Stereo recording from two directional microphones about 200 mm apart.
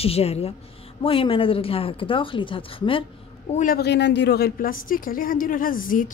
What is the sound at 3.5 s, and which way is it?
A woman's voice, 45° left (ahead or behind).